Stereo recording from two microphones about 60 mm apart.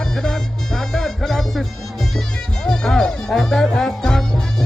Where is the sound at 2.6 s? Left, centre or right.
Centre.